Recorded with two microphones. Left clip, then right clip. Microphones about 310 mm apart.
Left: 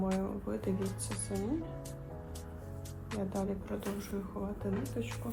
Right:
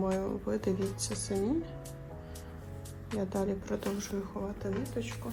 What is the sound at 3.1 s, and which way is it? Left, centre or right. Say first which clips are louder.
Speech: right 3 dB; centre.